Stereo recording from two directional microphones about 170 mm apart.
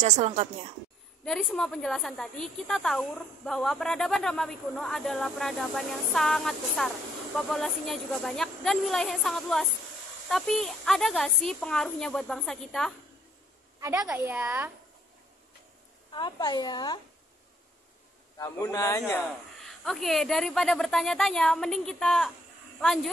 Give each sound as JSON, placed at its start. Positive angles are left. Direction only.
{"t": 0.0, "sound": "a woman's voice", "side_deg": -40}
{"t": 1.2, "sound": "a woman's voice", "side_deg": 5}
{"t": 13.7, "sound": "a woman's voice", "side_deg": -20}
{"t": 16.1, "sound": "a woman's voice", "side_deg": 25}
{"t": 18.4, "sound": "a woman's voice", "side_deg": 20}